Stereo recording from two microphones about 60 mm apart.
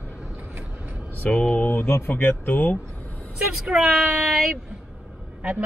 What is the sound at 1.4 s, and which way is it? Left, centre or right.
Speech, left.